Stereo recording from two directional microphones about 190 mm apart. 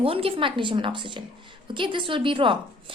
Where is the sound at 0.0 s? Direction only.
30° right (ahead or behind).